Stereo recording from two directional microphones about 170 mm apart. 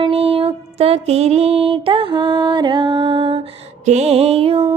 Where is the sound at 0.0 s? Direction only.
35° right (ahead or behind).